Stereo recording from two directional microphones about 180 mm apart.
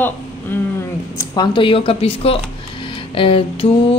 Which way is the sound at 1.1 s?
20° left (ahead or behind).